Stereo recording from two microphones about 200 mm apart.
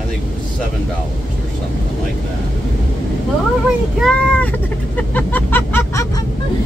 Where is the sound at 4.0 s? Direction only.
5° left (ahead or behind).